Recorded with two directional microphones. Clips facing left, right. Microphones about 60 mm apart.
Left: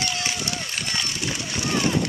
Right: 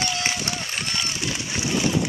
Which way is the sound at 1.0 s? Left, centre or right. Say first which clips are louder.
Even; centre.